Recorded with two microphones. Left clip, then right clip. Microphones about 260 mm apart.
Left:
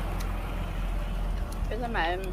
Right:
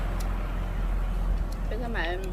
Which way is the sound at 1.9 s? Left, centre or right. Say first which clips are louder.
Left 3 dB; centre.